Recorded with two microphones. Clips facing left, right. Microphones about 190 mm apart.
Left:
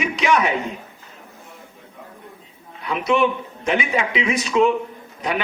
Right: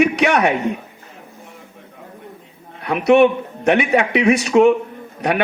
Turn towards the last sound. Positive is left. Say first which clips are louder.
# right 5 dB
turn(degrees=-65)  # may be behind; listen again after turning